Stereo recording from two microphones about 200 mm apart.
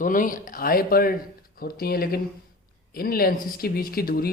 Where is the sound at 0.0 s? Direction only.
40° left (ahead or behind).